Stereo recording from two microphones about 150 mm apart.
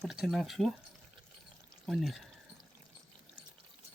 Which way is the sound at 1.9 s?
Centre (ahead or behind).